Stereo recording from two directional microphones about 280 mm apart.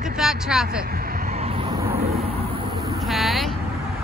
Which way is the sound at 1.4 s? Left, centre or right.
Centre.